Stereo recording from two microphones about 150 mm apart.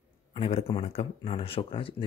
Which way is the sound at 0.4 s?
40° left (ahead or behind).